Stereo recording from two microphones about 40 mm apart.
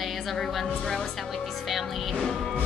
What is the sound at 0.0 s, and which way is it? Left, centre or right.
Speech, centre.